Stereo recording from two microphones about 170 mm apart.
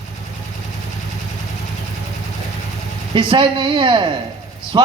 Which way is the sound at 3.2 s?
30° right (ahead or behind).